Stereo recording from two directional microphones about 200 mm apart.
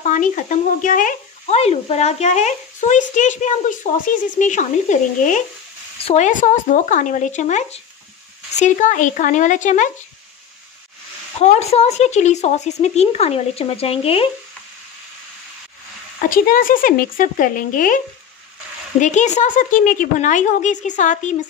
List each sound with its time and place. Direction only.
0.0 s speech: 40° left (ahead or behind)
11.3 s speech: 30° left (ahead or behind)
16.2 s speech: 45° left (ahead or behind)